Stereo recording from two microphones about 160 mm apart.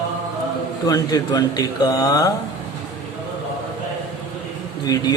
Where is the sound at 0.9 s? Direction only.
25° left (ahead or behind).